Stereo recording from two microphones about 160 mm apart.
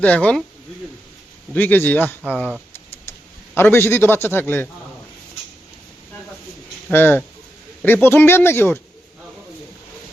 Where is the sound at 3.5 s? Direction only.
15° left (ahead or behind).